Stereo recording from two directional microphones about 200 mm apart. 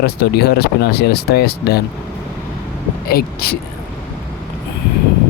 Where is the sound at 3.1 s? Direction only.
50° left (ahead or behind).